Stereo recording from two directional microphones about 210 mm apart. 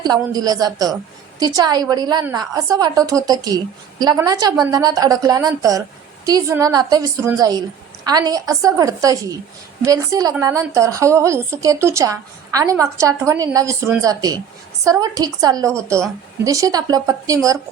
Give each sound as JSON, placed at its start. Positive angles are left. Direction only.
{"t": 0.0, "sound": "a woman's voice", "side_deg": -20}